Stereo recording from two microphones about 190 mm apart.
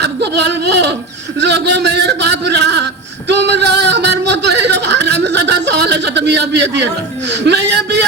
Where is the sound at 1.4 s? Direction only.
65° right (ahead or behind).